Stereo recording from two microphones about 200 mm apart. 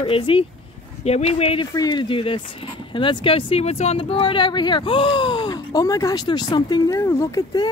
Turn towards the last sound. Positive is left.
turn(degrees=20)  # may be behind; listen again after turning